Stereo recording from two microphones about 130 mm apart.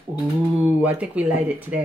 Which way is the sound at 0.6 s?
10° right (ahead or behind).